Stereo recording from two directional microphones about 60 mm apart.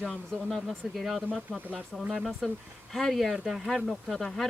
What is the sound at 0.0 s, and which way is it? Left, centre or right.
Speech, centre.